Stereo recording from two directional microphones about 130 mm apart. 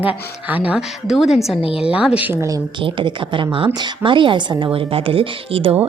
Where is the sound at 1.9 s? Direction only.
10° right (ahead or behind).